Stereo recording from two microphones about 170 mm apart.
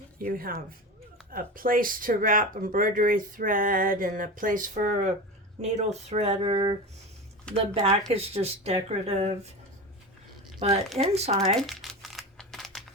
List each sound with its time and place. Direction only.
0.2 s speech: 55° right (ahead or behind); by 9.5 s 40° right (ahead or behind)
10.9 s speech: 40° right (ahead or behind)
11.6 s crumpling: centre (ahead or behind)